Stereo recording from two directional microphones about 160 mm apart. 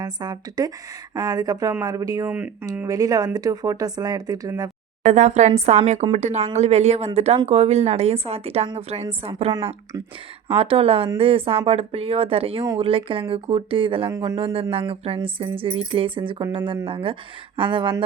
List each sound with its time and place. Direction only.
0.0 s speech: 25° right (ahead or behind)
5.0 s a woman's voice: 45° right (ahead or behind)
10.5 s speech: 35° right (ahead or behind)